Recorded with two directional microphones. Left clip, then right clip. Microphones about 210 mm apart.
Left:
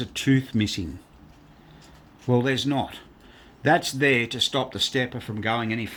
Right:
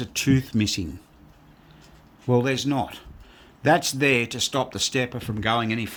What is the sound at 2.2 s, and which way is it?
Speech, 15° right (ahead or behind).